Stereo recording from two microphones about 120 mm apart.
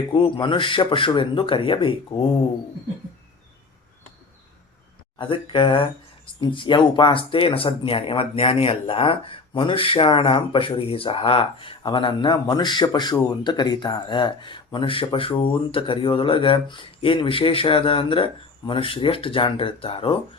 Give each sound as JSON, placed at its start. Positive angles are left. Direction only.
{"t": 0.1, "sound": "speech", "side_deg": 45}
{"t": 5.1, "sound": "speech", "side_deg": 45}